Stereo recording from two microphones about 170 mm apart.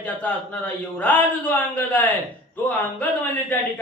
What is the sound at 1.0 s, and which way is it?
A man's voice, 10° left (ahead or behind).